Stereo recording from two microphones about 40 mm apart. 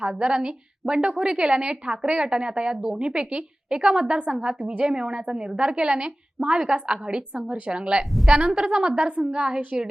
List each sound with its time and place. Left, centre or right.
0.0 s a woman's voice: right